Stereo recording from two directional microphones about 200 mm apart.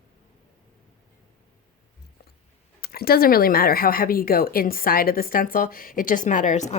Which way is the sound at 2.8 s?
50° left (ahead or behind).